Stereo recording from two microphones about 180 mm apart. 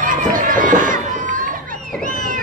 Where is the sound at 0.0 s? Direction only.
45° right (ahead or behind).